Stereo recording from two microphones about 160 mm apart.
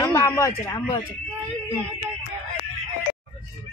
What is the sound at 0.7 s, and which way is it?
Speech, 25° left (ahead or behind).